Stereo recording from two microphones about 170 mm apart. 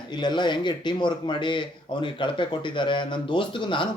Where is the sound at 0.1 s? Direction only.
25° left (ahead or behind).